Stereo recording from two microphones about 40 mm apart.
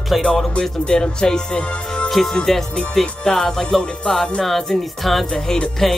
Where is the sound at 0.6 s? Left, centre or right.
Centre.